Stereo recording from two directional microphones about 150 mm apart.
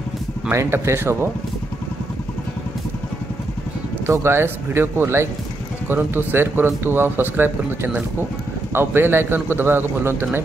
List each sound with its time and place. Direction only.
0.5 s speech: 20° right (ahead or behind)
4.0 s speech: 15° right (ahead or behind)